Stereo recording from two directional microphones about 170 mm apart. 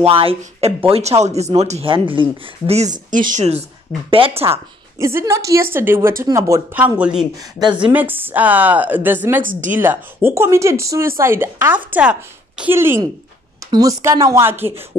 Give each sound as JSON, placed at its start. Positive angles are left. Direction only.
{"t": 0.0, "sound": "speech", "side_deg": -35}
{"t": 4.5, "sound": "a woman's voice", "side_deg": -15}
{"t": 9.4, "sound": "a woman's voice", "side_deg": -55}
{"t": 9.7, "sound": "a woman's voice", "side_deg": -10}